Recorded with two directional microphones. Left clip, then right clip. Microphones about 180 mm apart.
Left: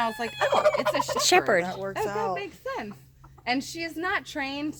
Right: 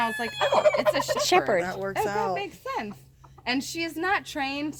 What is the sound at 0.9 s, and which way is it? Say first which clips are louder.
Fowl: right 1 dB; 35° right (ahead or behind).